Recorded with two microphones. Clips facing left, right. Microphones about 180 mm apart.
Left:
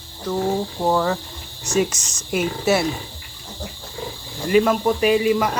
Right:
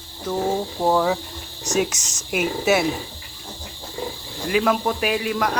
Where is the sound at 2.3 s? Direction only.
5° right (ahead or behind).